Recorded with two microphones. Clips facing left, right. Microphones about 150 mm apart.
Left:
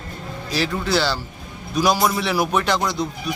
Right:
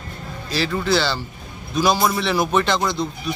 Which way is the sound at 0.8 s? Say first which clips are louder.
Right 1 dB; 10° left (ahead or behind).